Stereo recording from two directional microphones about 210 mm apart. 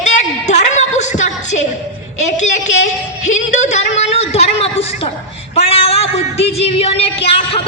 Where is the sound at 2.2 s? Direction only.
35° left (ahead or behind).